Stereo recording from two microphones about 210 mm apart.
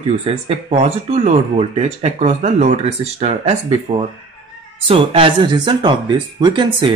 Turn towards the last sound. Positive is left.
turn(degrees=-20)  # may be behind; listen again after turning